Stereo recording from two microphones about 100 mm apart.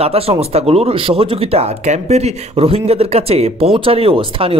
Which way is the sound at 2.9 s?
90° right.